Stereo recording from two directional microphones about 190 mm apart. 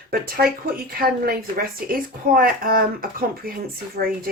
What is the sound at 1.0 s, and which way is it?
Speech, 50° right (ahead or behind).